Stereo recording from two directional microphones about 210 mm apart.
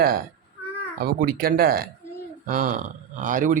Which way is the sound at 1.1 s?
45° right (ahead or behind).